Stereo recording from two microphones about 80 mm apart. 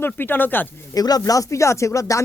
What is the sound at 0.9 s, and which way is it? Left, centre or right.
Speech, left.